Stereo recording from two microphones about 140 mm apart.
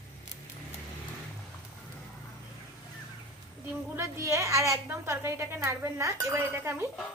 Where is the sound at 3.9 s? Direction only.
20° right (ahead or behind).